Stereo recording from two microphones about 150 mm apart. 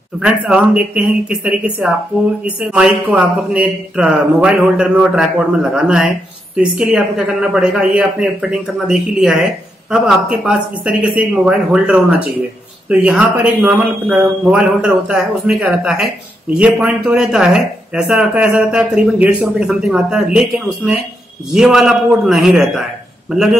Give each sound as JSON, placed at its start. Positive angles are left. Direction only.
{"t": 0.2, "sound": "a man's voice", "side_deg": -5}